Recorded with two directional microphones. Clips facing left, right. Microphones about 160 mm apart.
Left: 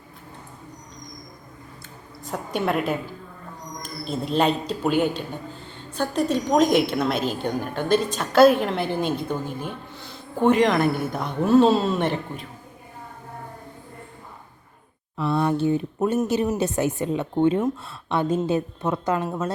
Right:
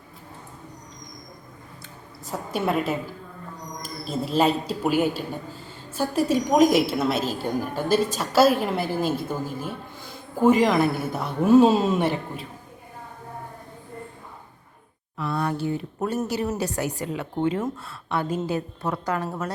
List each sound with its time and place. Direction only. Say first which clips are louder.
2.2 s a woman's voice: left 1 dB; centre (ahead or behind)
15.2 s a woman's voice: left 5 dB; 25° left (ahead or behind)